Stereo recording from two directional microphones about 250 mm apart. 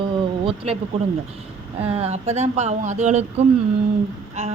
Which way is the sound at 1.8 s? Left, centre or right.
Right.